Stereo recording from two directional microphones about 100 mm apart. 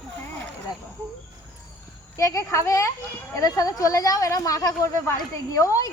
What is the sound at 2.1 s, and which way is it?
Speech, 30° left (ahead or behind).